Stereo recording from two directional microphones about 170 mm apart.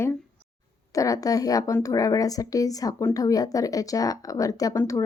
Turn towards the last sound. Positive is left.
turn(degrees=20)  # may be behind; listen again after turning